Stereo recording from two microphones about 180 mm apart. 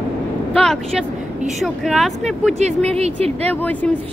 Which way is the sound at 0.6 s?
Centre (ahead or behind).